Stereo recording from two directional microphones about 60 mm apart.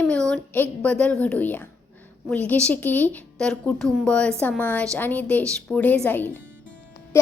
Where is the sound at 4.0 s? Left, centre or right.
Centre.